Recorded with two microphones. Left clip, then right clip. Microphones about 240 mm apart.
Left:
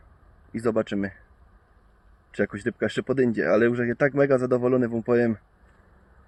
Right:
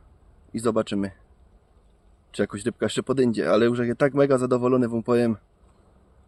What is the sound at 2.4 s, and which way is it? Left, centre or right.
Speech, centre.